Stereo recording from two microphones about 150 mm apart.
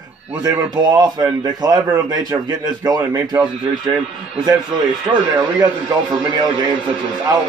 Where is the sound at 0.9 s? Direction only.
25° right (ahead or behind).